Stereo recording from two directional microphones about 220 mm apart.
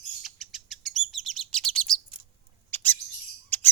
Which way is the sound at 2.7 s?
10° left (ahead or behind).